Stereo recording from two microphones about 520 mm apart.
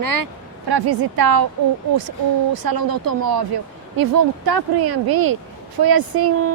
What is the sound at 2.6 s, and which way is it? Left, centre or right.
A woman's voice, right.